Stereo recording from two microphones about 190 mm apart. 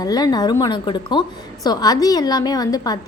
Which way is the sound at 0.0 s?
20° left (ahead or behind).